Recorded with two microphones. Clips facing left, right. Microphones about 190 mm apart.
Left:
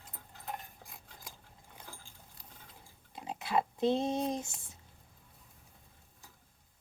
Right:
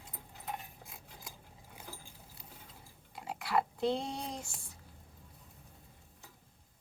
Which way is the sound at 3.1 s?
20° left (ahead or behind).